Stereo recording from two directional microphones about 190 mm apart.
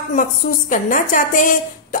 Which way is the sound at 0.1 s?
45° left (ahead or behind).